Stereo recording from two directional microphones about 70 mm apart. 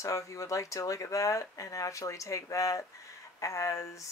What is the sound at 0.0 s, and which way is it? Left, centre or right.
Speech, left.